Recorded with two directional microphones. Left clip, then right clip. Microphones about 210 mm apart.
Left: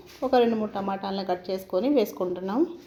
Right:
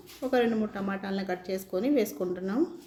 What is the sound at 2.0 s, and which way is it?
Speech, 25° right (ahead or behind).